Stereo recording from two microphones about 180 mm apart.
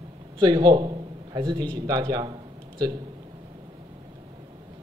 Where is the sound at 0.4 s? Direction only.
25° right (ahead or behind).